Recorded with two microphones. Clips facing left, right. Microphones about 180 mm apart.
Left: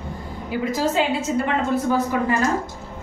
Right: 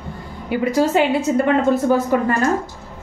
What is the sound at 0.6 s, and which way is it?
Speech, 65° right (ahead or behind).